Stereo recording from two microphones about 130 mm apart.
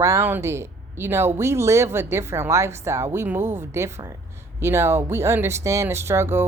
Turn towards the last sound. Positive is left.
turn(degrees=-20)  # may be behind; listen again after turning